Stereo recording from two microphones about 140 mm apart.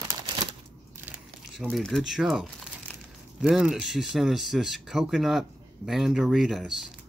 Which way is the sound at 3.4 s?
5° right (ahead or behind).